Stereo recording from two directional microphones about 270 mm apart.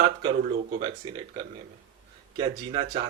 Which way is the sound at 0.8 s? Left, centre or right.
Centre.